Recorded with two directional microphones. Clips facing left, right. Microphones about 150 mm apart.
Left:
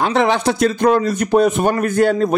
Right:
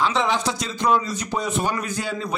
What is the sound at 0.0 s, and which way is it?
A man's voice, 60° left (ahead or behind).